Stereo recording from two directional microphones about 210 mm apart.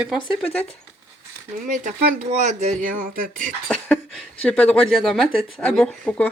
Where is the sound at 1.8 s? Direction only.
35° right (ahead or behind).